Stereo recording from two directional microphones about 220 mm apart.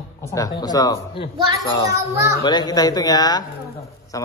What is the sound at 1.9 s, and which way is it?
Speech, 15° right (ahead or behind).